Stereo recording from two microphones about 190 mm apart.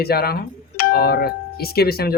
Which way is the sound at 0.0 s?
55° left (ahead or behind).